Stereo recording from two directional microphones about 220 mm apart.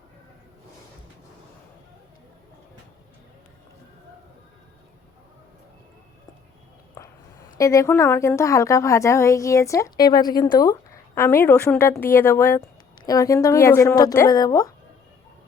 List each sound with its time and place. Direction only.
7.6 s a woman's voice: 15° left (ahead or behind)